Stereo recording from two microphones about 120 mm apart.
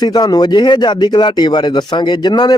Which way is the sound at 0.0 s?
35° left (ahead or behind).